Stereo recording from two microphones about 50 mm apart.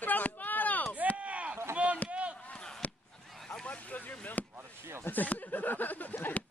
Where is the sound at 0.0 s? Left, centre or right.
Left.